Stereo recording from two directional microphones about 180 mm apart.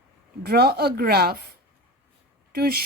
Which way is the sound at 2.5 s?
60° right (ahead or behind).